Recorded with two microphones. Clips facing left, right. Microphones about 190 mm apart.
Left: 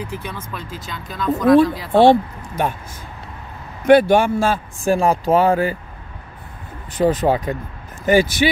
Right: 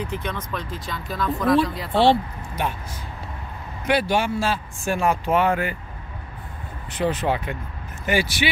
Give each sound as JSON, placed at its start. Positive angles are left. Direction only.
{"t": 0.0, "sound": "speech", "side_deg": 10}
{"t": 1.9, "sound": "speech", "side_deg": 50}
{"t": 3.8, "sound": "speech", "side_deg": 50}
{"t": 4.8, "sound": "speech", "side_deg": 35}
{"t": 6.9, "sound": "speech", "side_deg": 40}